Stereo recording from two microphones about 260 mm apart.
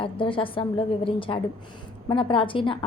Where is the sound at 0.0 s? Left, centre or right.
Centre.